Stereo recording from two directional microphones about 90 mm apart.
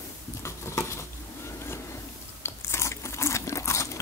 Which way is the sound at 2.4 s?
30° left (ahead or behind).